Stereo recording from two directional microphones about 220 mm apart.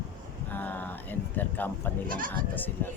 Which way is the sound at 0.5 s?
10° left (ahead or behind).